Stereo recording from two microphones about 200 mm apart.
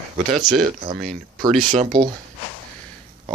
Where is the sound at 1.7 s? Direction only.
40° right (ahead or behind).